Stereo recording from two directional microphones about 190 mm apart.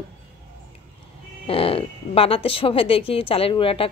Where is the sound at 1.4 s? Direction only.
30° left (ahead or behind).